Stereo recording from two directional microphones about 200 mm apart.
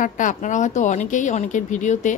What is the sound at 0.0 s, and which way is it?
Speech, 40° left (ahead or behind).